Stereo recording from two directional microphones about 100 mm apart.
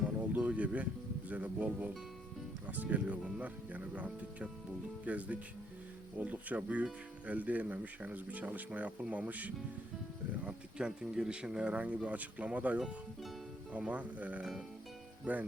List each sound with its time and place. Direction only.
0.3 s music: 15° right (ahead or behind)
1.3 s speech: 15° right (ahead or behind)